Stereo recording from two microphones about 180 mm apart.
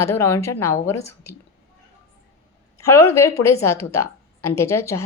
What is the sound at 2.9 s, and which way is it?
A woman's voice, 15° left (ahead or behind).